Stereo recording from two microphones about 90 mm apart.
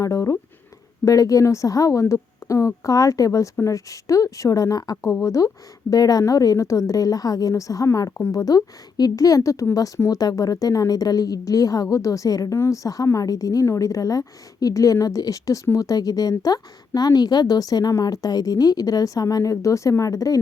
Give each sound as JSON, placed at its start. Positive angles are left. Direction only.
{"t": 0.0, "sound": "a woman's voice", "side_deg": 35}